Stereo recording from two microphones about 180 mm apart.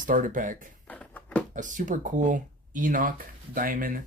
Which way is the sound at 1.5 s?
45° right (ahead or behind).